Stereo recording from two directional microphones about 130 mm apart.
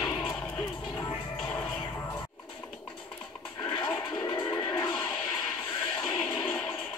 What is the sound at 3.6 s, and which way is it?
Music, 35° left (ahead or behind).